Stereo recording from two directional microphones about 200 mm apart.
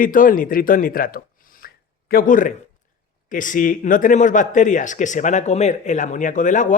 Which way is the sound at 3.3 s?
40° left (ahead or behind).